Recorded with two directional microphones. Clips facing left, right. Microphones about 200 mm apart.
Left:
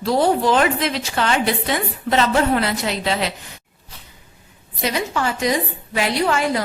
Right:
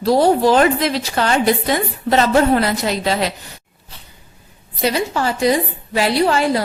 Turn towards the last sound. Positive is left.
turn(degrees=-35)  # may be behind; listen again after turning